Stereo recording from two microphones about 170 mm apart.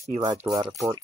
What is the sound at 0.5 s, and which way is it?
Rub, 20° right (ahead or behind).